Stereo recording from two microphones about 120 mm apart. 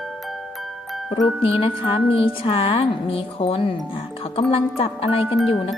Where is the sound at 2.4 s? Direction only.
50° left (ahead or behind).